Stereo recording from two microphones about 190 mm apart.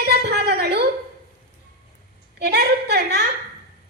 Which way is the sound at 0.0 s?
60° right (ahead or behind).